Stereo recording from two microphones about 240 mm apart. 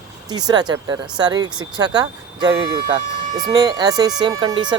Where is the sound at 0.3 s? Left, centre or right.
Centre.